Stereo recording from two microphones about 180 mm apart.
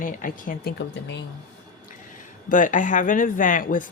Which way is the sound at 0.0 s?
50° left (ahead or behind).